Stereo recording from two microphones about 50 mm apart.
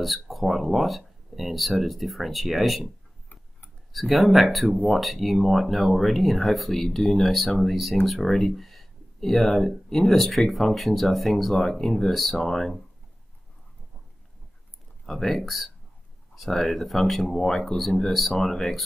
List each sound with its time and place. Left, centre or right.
0.0 s speech: centre
3.9 s speech: centre
15.0 s speech: centre